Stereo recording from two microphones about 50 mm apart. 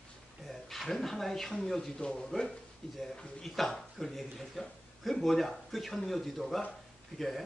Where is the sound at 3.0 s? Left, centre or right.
Centre.